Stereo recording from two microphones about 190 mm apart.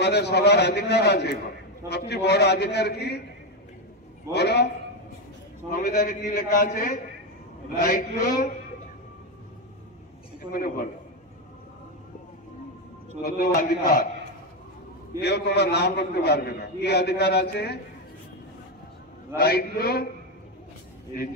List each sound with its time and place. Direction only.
0.0 s a man's voice: 60° left (ahead or behind)
4.3 s a man's voice: 60° left (ahead or behind)
5.7 s a man's voice: 45° left (ahead or behind)
10.5 s a man's voice: 45° left (ahead or behind)
13.6 s a man's voice: 50° left (ahead or behind)
15.2 s a man's voice: 60° left (ahead or behind)
19.3 s a man's voice: 55° left (ahead or behind)